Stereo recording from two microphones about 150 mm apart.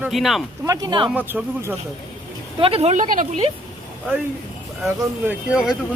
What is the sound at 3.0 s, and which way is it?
Speech, 60° right (ahead or behind).